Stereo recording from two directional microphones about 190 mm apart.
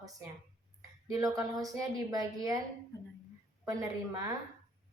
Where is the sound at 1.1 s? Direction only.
20° right (ahead or behind).